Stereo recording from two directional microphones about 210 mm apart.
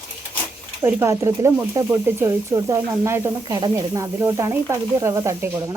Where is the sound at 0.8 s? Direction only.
10° right (ahead or behind).